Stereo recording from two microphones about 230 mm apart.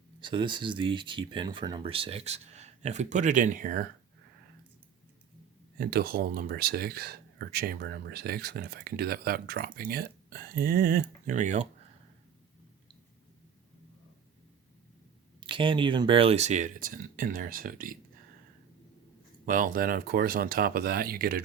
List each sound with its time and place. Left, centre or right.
0.2 s speech: right
5.7 s speech: right
15.4 s speech: right
19.5 s speech: right